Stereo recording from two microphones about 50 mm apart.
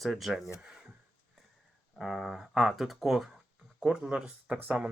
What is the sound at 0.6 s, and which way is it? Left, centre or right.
Speech, centre.